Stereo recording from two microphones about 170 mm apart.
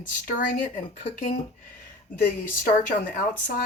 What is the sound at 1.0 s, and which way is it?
Speech, 40° left (ahead or behind).